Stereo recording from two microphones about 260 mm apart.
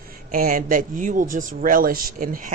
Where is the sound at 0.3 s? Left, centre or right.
Right.